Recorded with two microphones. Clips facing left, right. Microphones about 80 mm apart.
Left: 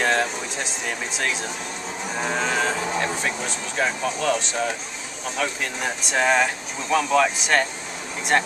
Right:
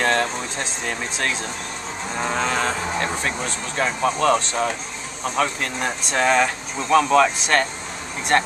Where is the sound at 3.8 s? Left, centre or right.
Right.